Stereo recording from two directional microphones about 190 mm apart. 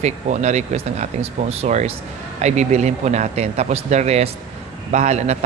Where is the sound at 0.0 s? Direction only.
35° right (ahead or behind).